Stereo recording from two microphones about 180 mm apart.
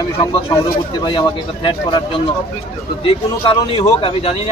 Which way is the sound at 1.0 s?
25° left (ahead or behind).